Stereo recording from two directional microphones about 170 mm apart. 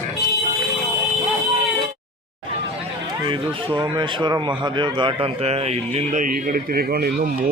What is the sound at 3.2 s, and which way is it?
Speech, 30° right (ahead or behind).